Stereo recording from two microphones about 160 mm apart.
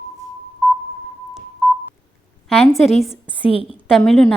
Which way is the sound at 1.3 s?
Centre (ahead or behind).